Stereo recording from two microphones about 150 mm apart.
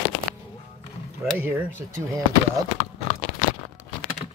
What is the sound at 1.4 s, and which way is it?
Speech, 15° right (ahead or behind).